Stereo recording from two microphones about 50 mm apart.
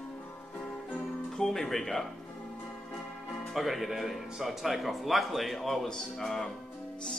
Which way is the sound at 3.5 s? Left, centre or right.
Centre.